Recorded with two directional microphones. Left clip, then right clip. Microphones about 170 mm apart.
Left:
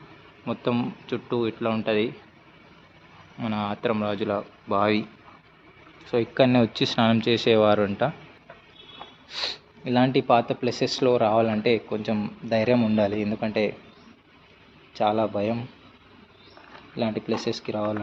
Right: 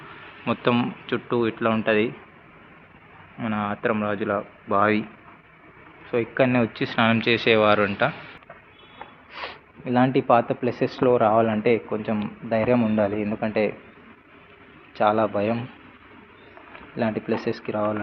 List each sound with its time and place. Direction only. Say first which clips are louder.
0.4 s speech: right 4 dB; 5° left (ahead or behind)
3.4 s speech: right 2 dB; 20° left (ahead or behind)
6.1 s speech: even; 35° left (ahead or behind)
9.3 s speech: left 5 dB; 30° left (ahead or behind); by 13.7 s 15° left (ahead or behind)
14.9 s speech: right 3 dB; 15° left (ahead or behind)
16.9 s speech: right 2 dB; 10° left (ahead or behind)